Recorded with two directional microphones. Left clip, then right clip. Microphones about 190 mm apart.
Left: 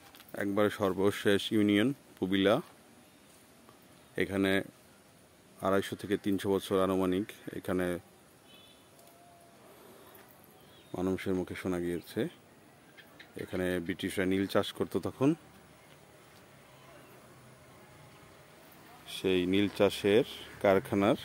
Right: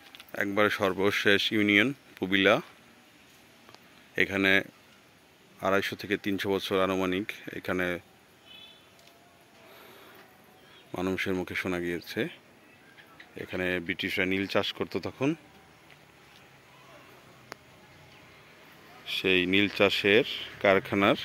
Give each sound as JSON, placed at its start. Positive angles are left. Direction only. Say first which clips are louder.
{"t": 0.6, "sound": "speech", "louder": "right 4 dB", "side_deg": 15}
{"t": 4.1, "sound": "speech", "louder": "right 6 dB", "side_deg": 10}
{"t": 11.0, "sound": "speech", "louder": "right 3 dB", "side_deg": 5}
{"t": 13.5, "sound": "speech", "louder": "right 4 dB", "side_deg": 15}
{"t": 19.0, "sound": "speech", "louder": "right 5 dB", "side_deg": 5}